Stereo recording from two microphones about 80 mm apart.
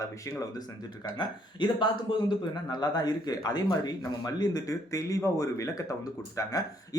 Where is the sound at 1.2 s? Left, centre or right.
Left.